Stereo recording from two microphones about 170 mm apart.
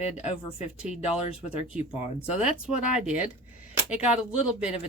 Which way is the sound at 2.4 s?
5° right (ahead or behind).